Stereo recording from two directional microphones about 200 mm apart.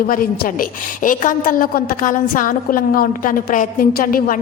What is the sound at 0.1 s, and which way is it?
A woman's voice, 45° left (ahead or behind).